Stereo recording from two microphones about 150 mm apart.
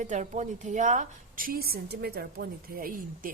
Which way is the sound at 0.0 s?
55° right (ahead or behind).